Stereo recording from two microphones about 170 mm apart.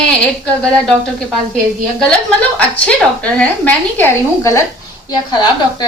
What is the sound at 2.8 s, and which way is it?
A woman's voice, 5° left (ahead or behind).